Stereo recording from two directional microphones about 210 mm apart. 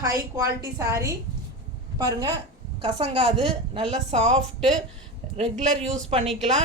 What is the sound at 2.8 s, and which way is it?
A woman's voice, 25° right (ahead or behind).